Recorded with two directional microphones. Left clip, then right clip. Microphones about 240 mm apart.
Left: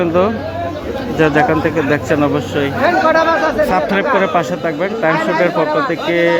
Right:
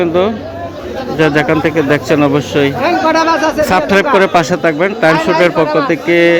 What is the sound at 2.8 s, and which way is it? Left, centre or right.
Speech, right.